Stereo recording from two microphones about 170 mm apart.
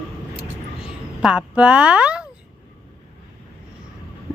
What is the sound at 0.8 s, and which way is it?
A woman's voice, 5° right (ahead or behind).